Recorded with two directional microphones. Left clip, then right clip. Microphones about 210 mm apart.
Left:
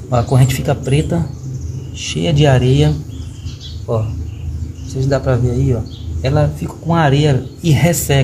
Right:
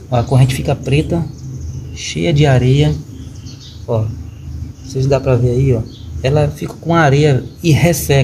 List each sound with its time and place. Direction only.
0.1 s speech: centre (ahead or behind)
5.1 s speech: 20° right (ahead or behind)